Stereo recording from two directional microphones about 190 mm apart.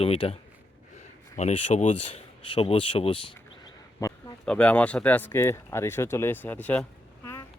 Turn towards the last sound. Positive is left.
turn(degrees=10)  # may be behind; listen again after turning